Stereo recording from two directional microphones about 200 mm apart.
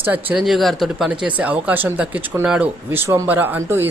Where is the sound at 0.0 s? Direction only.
10° right (ahead or behind).